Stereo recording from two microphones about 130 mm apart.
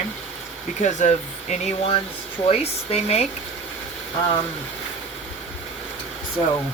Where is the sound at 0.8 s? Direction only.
65° left (ahead or behind).